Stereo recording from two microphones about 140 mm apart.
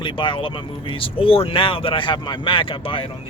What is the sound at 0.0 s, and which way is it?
Speech, 35° left (ahead or behind).